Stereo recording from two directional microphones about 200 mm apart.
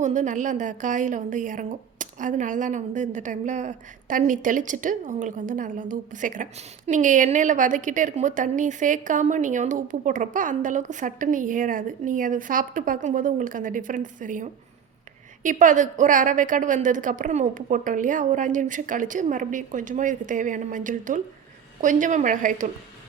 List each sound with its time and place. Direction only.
0.0 s a woman's voice: 40° right (ahead or behind)